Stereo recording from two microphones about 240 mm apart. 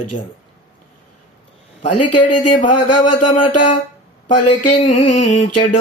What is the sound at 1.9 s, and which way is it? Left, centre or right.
Speech, left.